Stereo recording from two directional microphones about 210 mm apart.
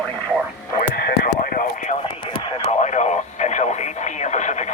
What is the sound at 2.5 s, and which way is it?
Radio, 35° left (ahead or behind).